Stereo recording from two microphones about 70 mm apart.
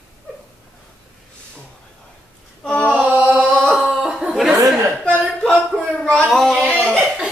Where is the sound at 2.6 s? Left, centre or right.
Centre.